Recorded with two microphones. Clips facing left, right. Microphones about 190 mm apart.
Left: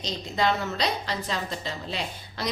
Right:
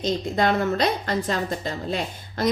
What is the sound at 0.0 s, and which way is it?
A woman's voice, 50° right (ahead or behind).